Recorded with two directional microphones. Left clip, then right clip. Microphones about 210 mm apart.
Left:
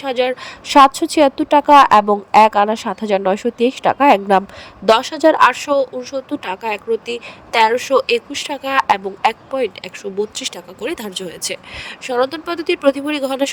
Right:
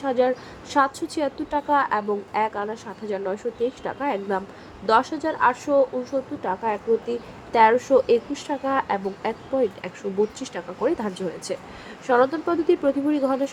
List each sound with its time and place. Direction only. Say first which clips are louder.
0.0 s speech: left 4 dB; 40° left (ahead or behind)